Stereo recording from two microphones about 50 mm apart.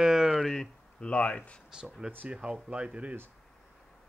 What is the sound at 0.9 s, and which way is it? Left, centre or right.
Speech, left.